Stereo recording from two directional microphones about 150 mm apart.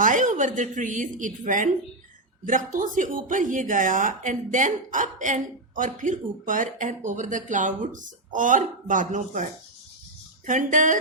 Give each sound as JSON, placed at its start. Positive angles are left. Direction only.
{"t": 0.0, "sound": "a woman's voice", "side_deg": -60}